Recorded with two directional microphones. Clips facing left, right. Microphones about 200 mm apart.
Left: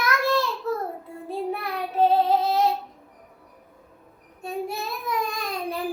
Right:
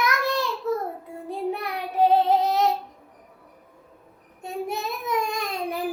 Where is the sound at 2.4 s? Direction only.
20° right (ahead or behind).